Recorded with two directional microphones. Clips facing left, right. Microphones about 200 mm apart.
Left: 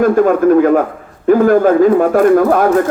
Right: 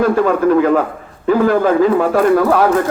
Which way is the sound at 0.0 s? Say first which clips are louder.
Left 3 dB; 50° left (ahead or behind).